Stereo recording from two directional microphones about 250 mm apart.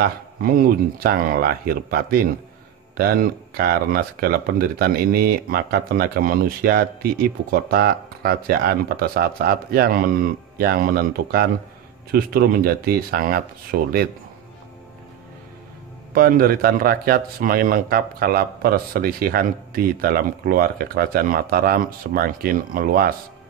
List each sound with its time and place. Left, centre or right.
0.0 s speech: right
16.2 s speech: right